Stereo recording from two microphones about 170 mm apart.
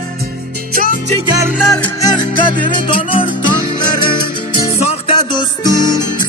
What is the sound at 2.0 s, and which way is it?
Music, 25° left (ahead or behind).